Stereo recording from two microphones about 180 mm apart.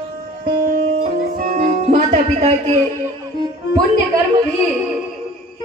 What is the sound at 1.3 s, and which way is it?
Music, 50° right (ahead or behind).